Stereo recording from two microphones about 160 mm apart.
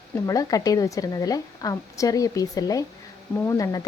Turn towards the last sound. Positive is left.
turn(degrees=20)  # may be behind; listen again after turning